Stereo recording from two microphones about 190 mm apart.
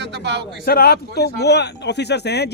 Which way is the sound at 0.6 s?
50° left (ahead or behind).